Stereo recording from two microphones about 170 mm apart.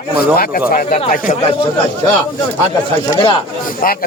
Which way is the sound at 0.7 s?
40° left (ahead or behind).